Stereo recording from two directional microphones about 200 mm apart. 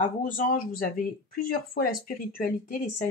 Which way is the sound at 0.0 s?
40° left (ahead or behind).